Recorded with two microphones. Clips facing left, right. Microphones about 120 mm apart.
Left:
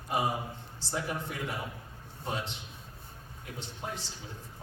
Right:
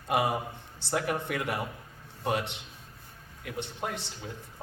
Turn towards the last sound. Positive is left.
turn(degrees=-65)  # may be behind; listen again after turning